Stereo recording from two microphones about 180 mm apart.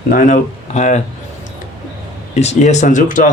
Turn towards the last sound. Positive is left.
turn(degrees=45)  # may be behind; listen again after turning